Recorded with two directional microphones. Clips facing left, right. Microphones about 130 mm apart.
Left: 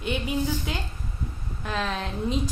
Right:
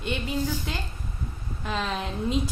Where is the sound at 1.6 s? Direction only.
5° right (ahead or behind).